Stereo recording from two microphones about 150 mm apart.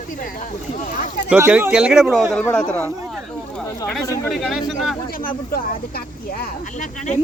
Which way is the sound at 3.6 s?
5° left (ahead or behind).